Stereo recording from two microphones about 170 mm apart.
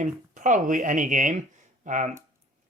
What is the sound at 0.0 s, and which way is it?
Speech, 45° right (ahead or behind).